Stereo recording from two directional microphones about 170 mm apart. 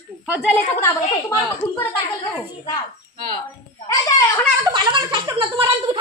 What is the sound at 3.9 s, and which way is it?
Speech, 20° left (ahead or behind).